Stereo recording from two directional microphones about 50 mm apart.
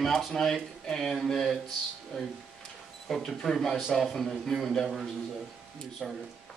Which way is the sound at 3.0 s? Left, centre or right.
Centre.